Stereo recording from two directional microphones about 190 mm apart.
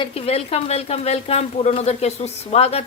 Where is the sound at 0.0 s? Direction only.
30° left (ahead or behind).